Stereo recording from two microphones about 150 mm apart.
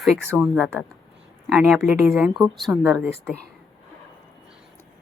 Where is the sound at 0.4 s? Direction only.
5° right (ahead or behind).